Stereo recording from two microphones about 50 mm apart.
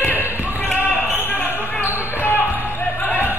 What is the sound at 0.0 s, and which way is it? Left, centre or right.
Basketball bounce, left.